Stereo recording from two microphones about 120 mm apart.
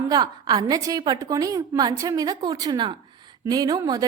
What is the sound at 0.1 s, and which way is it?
A woman's voice, 35° right (ahead or behind).